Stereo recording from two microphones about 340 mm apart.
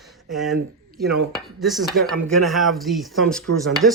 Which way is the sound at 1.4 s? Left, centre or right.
Centre.